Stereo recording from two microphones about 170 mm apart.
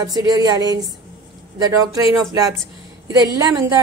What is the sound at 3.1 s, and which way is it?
Speech, 20° right (ahead or behind).